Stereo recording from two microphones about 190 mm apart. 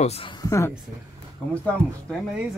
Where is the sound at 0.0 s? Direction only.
35° left (ahead or behind).